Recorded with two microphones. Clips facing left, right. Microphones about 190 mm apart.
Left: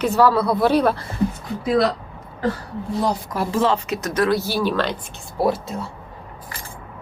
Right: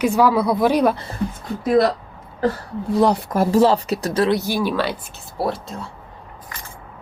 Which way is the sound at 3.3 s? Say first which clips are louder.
Right 5 dB; 40° right (ahead or behind).